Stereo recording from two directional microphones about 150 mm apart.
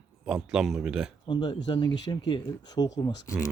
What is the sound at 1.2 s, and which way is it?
Speech, 30° left (ahead or behind).